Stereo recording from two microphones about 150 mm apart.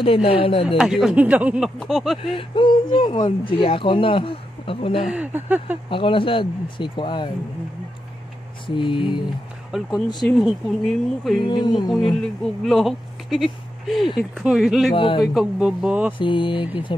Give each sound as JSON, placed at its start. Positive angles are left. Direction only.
{"t": 0.0, "sound": "speech", "side_deg": 40}
{"t": 0.7, "sound": "speech", "side_deg": -5}
{"t": 1.8, "sound": "speech", "side_deg": 0}
{"t": 2.3, "sound": "speech", "side_deg": 35}
{"t": 5.0, "sound": "speech", "side_deg": -10}
{"t": 5.9, "sound": "speech", "side_deg": 35}
{"t": 8.6, "sound": "speech", "side_deg": 35}
{"t": 9.7, "sound": "speech", "side_deg": 0}
{"t": 11.4, "sound": "speech", "side_deg": 30}
{"t": 11.9, "sound": "speech", "side_deg": 0}
{"t": 15.0, "sound": "speech", "side_deg": 35}
{"t": 15.3, "sound": "speech", "side_deg": -5}
{"t": 16.2, "sound": "speech", "side_deg": 35}